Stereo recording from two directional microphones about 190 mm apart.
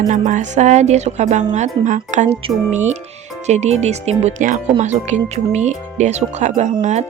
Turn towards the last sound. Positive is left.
turn(degrees=-35)  # may be behind; listen again after turning